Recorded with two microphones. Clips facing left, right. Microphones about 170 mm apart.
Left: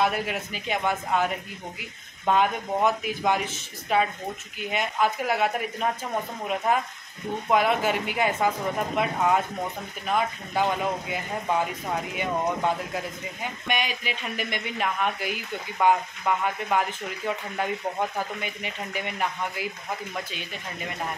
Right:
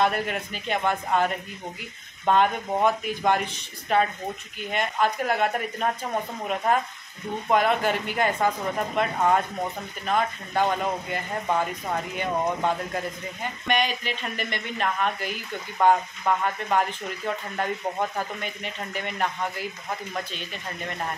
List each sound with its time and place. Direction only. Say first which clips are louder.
0.0 s speech: right 1 dB; 5° left (ahead or behind)
7.4 s speech: right 1 dB; 5° left (ahead or behind)
18.4 s speech: even; 10° left (ahead or behind)